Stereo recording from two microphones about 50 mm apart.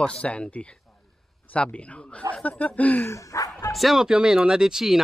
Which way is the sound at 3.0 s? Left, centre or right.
Left.